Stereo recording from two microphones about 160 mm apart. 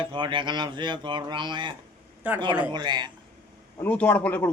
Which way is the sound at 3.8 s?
10° left (ahead or behind).